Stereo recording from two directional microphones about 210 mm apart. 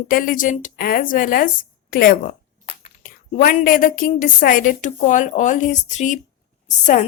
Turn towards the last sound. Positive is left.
turn(degrees=35)  # may be behind; listen again after turning